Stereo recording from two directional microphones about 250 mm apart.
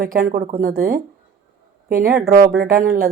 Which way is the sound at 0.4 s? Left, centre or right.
Right.